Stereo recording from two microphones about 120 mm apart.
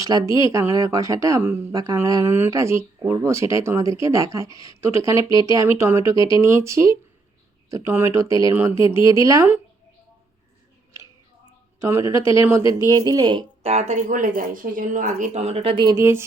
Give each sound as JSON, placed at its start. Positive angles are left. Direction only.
{"t": 0.0, "sound": "speech", "side_deg": -30}
{"t": 1.7, "sound": "speech", "side_deg": -30}
{"t": 11.8, "sound": "speech", "side_deg": -20}
{"t": 13.6, "sound": "speech", "side_deg": -60}
{"t": 15.7, "sound": "speech", "side_deg": -35}
{"t": 16.0, "sound": "speech", "side_deg": -20}